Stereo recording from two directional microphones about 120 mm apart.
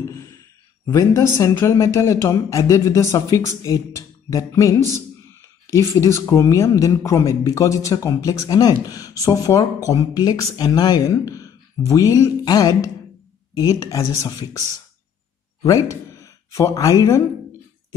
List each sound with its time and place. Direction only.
0.0 s a sound: 25° left (ahead or behind)
0.8 s speech: 25° left (ahead or behind)
15.6 s speech: 30° left (ahead or behind)